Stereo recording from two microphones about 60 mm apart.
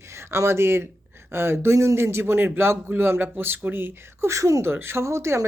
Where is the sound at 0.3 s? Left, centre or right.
Right.